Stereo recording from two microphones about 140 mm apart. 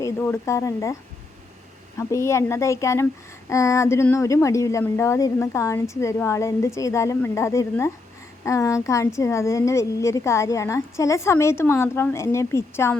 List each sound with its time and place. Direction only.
0.0 s speech: 20° left (ahead or behind)
2.0 s speech: 20° left (ahead or behind)